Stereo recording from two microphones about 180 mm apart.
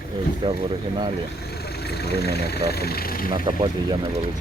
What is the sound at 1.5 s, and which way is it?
Speech, 60° left (ahead or behind).